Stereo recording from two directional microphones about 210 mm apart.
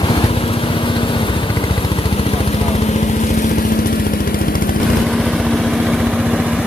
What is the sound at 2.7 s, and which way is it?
Vehicle, 35° left (ahead or behind).